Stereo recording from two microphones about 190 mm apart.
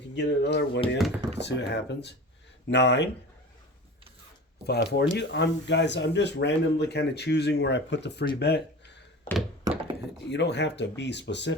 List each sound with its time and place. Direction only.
0.2 s speech: 65° left (ahead or behind)
0.9 s speech: centre (ahead or behind)
1.5 s speech: 65° left (ahead or behind)
4.6 s speech: 60° left (ahead or behind)
10.2 s speech: 65° left (ahead or behind)